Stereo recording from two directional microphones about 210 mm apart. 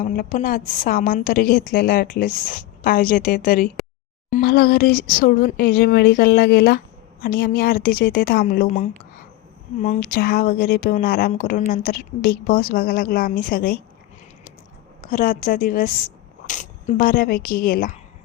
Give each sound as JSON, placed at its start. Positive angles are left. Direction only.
{"t": 0.0, "sound": "speech", "side_deg": 40}
{"t": 15.0, "sound": "speech", "side_deg": 40}